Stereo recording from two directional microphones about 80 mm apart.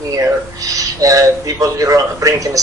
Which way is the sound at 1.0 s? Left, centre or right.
Right.